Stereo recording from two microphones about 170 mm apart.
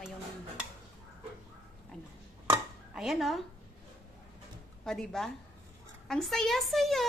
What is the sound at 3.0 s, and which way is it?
Speech, centre (ahead or behind).